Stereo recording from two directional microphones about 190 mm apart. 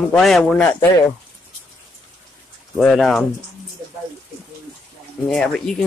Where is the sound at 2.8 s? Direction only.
Centre (ahead or behind).